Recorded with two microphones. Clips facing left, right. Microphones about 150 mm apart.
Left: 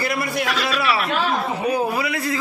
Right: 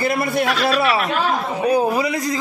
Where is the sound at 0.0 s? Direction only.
25° right (ahead or behind).